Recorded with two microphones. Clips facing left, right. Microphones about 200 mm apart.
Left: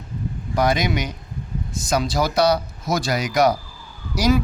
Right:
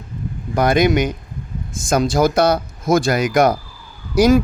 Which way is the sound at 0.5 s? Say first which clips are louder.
Right 6 dB; 55° right (ahead or behind).